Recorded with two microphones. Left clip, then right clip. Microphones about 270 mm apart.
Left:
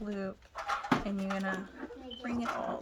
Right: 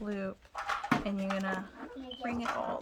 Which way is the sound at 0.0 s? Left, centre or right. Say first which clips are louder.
Right 1 dB; centre.